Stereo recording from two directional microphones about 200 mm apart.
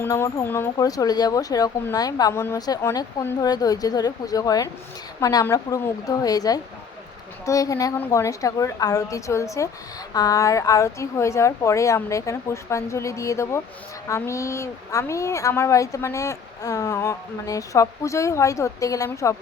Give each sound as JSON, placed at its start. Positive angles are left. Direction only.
{"t": 0.0, "sound": "a woman's voice", "side_deg": 15}